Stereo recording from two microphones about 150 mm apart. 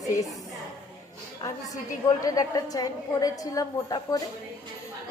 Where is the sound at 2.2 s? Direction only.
25° left (ahead or behind).